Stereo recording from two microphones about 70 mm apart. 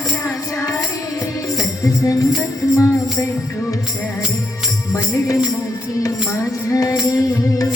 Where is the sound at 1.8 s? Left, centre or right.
Left.